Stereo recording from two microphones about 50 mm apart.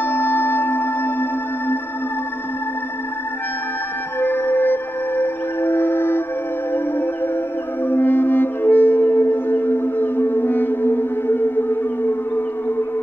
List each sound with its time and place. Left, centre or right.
0.0 s music: left
4.2 s music: left
7.8 s music: left